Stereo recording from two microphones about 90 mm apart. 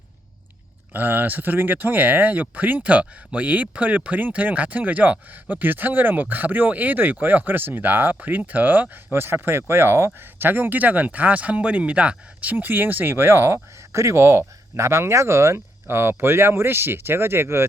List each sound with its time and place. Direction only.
0.9 s speech: 20° right (ahead or behind)